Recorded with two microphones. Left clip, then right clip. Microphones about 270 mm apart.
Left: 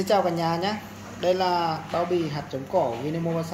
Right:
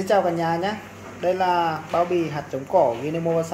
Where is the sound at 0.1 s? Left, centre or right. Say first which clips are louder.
Right 3 dB; centre.